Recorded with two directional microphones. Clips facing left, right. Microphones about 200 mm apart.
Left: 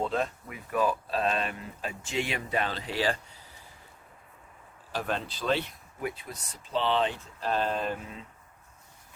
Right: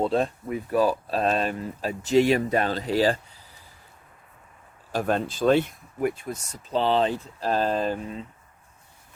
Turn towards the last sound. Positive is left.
turn(degrees=-35)  # may be behind; listen again after turning